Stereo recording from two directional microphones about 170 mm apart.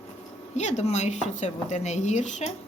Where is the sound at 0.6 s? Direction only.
40° left (ahead or behind).